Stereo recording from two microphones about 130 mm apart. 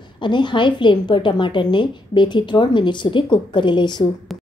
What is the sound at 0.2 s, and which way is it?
A woman's voice, 35° left (ahead or behind).